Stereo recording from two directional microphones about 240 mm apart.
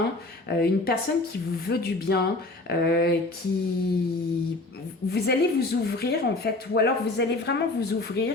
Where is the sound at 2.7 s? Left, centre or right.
Left.